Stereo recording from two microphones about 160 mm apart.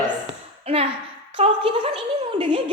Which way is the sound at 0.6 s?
40° right (ahead or behind).